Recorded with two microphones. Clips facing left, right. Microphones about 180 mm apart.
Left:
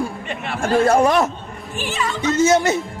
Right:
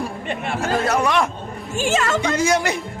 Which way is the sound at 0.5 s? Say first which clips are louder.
Left 6 dB; 50° left (ahead or behind).